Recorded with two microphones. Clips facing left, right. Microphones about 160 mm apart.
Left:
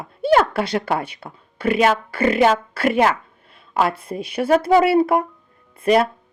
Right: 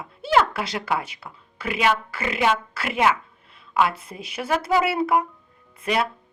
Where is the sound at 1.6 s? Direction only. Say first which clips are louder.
Left 6 dB; 45° left (ahead or behind).